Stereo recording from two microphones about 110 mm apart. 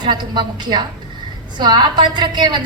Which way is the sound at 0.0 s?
45° right (ahead or behind).